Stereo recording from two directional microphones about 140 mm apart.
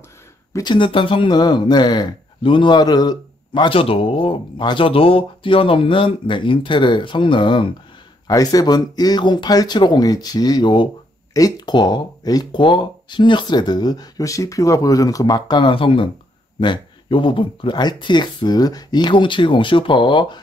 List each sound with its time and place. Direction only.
0.5 s speech: 25° left (ahead or behind)
0.7 s a man's voice: 35° left (ahead or behind)
8.3 s a man's voice: 25° left (ahead or behind)